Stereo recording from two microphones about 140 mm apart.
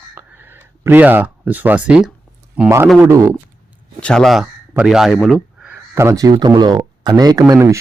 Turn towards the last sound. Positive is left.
turn(degrees=-25)  # may be behind; listen again after turning